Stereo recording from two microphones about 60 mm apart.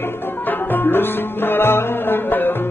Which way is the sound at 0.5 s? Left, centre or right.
Left.